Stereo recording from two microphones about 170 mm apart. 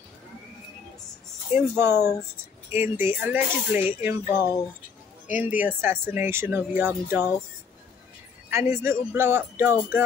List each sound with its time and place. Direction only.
1.5 s speech: 15° right (ahead or behind)
4.3 s speech: 20° left (ahead or behind)
5.4 s speech: 10° right (ahead or behind)
8.5 s speech: 15° right (ahead or behind)